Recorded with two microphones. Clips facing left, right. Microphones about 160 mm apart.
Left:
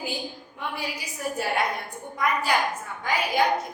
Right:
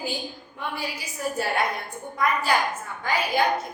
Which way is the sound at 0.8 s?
15° left (ahead or behind).